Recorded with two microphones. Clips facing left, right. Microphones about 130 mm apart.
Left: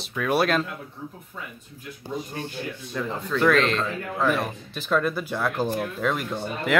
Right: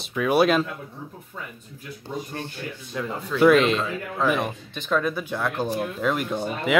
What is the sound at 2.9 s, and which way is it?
Speech, 10° right (ahead or behind).